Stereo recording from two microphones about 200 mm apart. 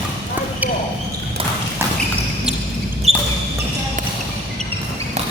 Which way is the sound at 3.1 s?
30° left (ahead or behind).